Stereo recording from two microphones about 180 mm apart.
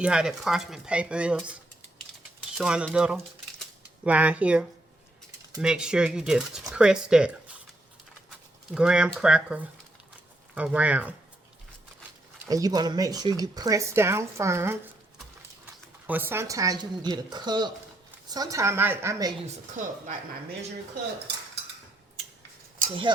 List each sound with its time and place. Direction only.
0.0 s speech: 5° right (ahead or behind)
2.6 s speech: 5° right (ahead or behind)
3.6 s a sound: 5° right (ahead or behind)
5.5 s speech: 5° right (ahead or behind)
8.7 s speech: 5° right (ahead or behind)
12.5 s speech: 20° right (ahead or behind)
16.0 s speech: 10° right (ahead or behind)
23.1 s speech: 25° right (ahead or behind)